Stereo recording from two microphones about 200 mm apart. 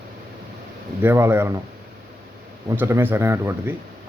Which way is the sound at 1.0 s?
10° right (ahead or behind).